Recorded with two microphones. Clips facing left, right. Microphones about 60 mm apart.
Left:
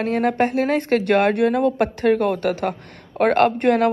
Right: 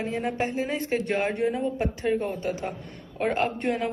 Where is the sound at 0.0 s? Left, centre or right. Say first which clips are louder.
Left 9 dB; left.